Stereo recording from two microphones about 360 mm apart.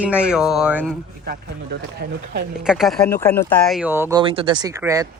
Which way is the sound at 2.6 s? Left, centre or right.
Centre.